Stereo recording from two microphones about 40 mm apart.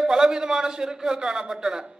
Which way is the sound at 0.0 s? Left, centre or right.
Centre.